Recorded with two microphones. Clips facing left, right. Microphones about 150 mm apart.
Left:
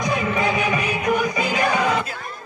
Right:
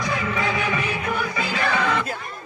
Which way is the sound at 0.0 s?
20° left (ahead or behind).